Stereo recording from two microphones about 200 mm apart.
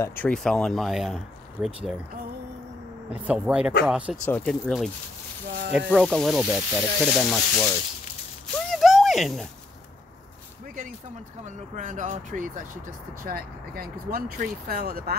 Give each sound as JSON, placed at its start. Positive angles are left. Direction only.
{"t": 0.0, "sound": "speech", "side_deg": 10}
{"t": 3.1, "sound": "speech", "side_deg": -5}
{"t": 4.3, "sound": "speech", "side_deg": 5}
{"t": 8.6, "sound": "a sound", "side_deg": 0}
{"t": 11.4, "sound": "speech", "side_deg": -35}